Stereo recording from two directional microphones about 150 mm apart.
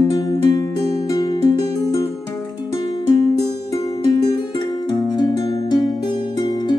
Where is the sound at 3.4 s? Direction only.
30° left (ahead or behind).